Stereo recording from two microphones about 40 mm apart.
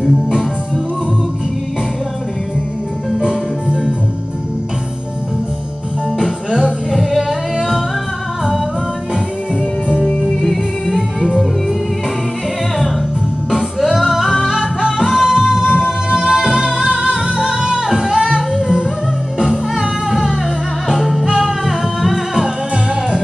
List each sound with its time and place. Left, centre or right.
3.2 s music: right
6.9 s singing: centre
10.2 s music: centre
13.5 s music: centre
14.5 s music: centre
20.1 s music: centre